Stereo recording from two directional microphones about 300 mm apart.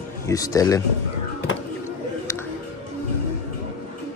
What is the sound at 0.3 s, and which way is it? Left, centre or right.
Speech, centre.